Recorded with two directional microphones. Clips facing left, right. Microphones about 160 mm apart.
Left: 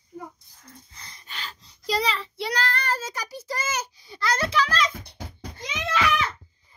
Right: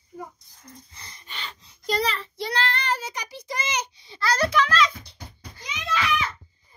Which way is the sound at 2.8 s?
15° right (ahead or behind).